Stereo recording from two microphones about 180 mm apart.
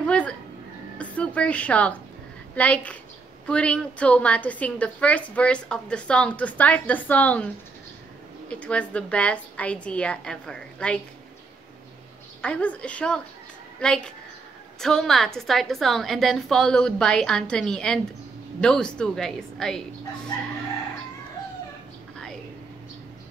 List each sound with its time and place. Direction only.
0.0 s a sound: 5° left (ahead or behind)
0.9 s a woman's voice: 5° left (ahead or behind)
8.5 s a woman's voice: 5° left (ahead or behind)
12.4 s a woman's voice: 5° left (ahead or behind)